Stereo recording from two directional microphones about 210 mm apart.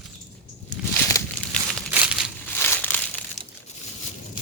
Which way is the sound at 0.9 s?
10° left (ahead or behind).